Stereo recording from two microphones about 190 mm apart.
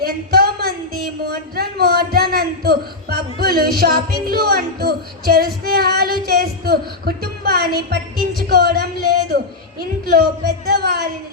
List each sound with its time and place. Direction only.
0.0 s a sound: 55° right (ahead or behind)
1.2 s a man's voice: 55° right (ahead or behind)
10.7 s a man's voice: 55° right (ahead or behind)